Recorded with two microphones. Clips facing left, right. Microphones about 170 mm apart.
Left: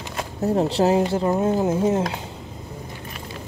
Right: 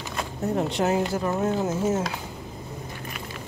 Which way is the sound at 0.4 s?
35° left (ahead or behind).